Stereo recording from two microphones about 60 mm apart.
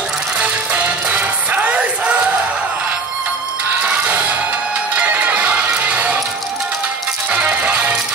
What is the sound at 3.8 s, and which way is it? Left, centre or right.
Music, right.